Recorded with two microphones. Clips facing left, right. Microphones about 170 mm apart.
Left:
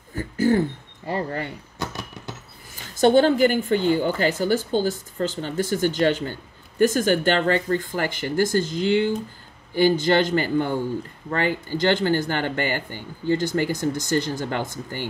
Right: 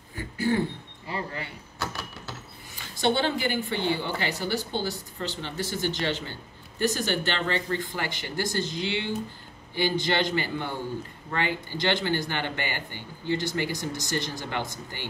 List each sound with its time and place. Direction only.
0.1 s throat clearing: 45° left (ahead or behind)
1.8 s a sound: 15° left (ahead or behind)
2.7 s speech: 45° left (ahead or behind)